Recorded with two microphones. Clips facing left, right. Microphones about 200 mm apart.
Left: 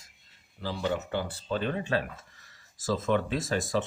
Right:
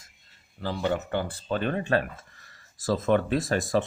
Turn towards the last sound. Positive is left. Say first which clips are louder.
# right 4 dB
turn(degrees=-55)  # may be behind; listen again after turning